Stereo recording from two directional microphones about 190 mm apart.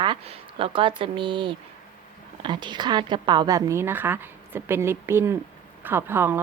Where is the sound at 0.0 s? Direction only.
25° right (ahead or behind).